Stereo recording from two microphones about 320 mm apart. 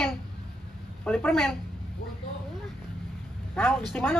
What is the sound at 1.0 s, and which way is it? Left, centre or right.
Speech, centre.